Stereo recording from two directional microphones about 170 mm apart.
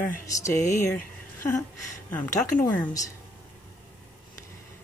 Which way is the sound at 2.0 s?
10° left (ahead or behind).